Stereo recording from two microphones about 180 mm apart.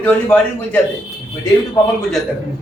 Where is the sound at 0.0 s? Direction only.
10° left (ahead or behind).